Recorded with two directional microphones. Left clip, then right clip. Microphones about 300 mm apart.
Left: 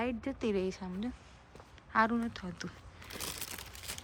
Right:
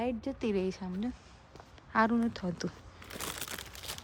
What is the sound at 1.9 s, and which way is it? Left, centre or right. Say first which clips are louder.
Crumpling: right 1 dB; centre.